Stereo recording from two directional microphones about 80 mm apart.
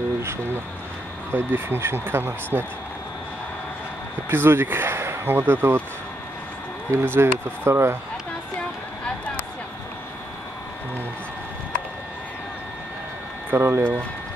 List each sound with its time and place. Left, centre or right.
1.3 s speech: right
4.3 s speech: right
6.9 s speech: right
9.0 s a sound: centre
13.5 s speech: right